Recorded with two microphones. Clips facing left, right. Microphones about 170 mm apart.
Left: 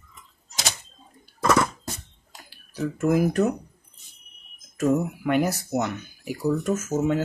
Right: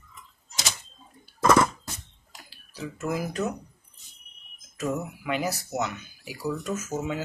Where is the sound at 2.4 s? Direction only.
55° left (ahead or behind).